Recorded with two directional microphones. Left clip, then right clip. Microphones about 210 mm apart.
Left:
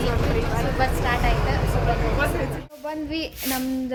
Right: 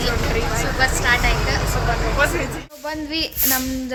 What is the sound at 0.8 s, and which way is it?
Speech, 15° left (ahead or behind).